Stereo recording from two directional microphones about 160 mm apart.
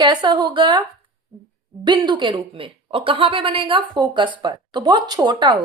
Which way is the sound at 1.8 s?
30° right (ahead or behind).